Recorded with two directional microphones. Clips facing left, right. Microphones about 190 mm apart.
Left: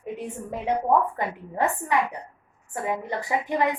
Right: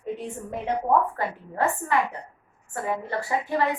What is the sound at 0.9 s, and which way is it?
A woman's voice, 15° left (ahead or behind).